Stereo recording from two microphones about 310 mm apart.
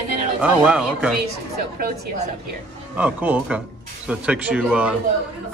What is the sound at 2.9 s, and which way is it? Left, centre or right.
A man's voice, centre.